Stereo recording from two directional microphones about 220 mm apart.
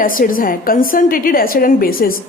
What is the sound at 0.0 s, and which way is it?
A woman's voice, 40° left (ahead or behind).